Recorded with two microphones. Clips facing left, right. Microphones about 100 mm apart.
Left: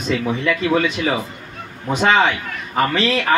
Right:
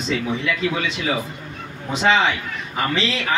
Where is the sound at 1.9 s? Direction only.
50° left (ahead or behind).